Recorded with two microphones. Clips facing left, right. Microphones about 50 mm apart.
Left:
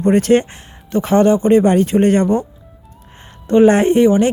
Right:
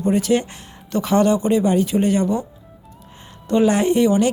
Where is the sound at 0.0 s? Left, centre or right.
Left.